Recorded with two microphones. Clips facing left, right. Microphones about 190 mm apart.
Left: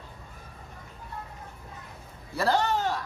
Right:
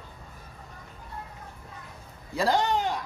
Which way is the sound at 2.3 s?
15° right (ahead or behind).